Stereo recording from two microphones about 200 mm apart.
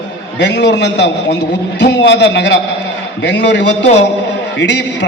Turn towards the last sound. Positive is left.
turn(degrees=60)  # may be behind; listen again after turning